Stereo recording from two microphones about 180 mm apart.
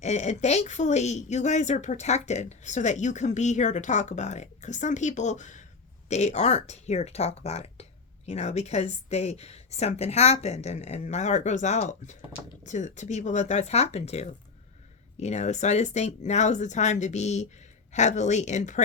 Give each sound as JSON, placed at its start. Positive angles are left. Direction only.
{"t": 0.0, "sound": "speech", "side_deg": 40}